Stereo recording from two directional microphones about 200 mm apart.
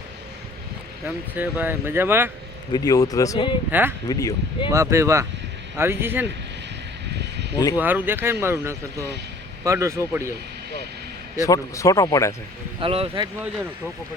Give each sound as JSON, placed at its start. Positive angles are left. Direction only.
{"t": 1.0, "sound": "speech", "side_deg": -10}
{"t": 2.7, "sound": "speech", "side_deg": 20}
{"t": 3.7, "sound": "speech", "side_deg": -10}
{"t": 4.1, "sound": "speech", "side_deg": 20}
{"t": 4.7, "sound": "speech", "side_deg": -15}
{"t": 7.8, "sound": "speech", "side_deg": -10}
{"t": 11.3, "sound": "a man's voice", "side_deg": 15}
{"t": 12.8, "sound": "speech", "side_deg": -30}